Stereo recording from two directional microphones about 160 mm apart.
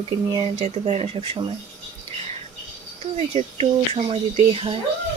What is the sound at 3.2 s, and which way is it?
Speech, 40° right (ahead or behind).